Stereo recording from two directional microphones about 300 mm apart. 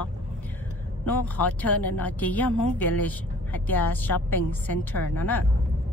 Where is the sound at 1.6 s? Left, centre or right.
Centre.